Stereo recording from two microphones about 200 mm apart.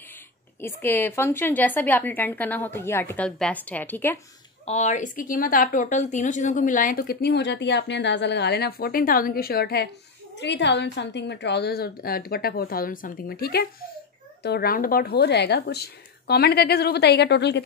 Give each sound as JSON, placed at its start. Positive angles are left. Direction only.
{"t": 0.6, "sound": "a woman's voice", "side_deg": 10}
{"t": 4.6, "sound": "a woman's voice", "side_deg": 35}